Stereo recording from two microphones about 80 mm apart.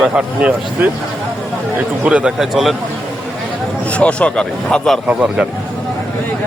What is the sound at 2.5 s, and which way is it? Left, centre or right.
Speech, centre.